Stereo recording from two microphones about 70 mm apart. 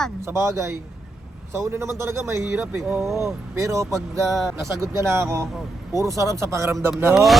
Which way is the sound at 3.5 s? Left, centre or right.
Right.